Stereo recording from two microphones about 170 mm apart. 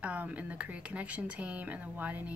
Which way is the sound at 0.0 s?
10° right (ahead or behind).